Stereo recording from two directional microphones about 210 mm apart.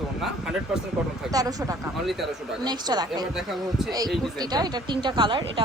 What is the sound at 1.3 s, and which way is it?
A woman's voice, 15° right (ahead or behind).